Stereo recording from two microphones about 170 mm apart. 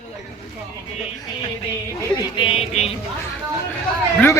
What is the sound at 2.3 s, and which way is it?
Music, 35° left (ahead or behind).